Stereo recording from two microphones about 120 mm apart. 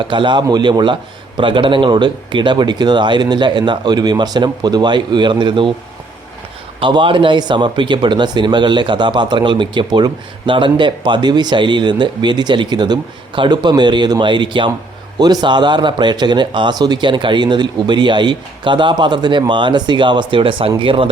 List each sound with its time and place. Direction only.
0.0 s speech: 40° right (ahead or behind)
6.7 s speech: 45° right (ahead or behind)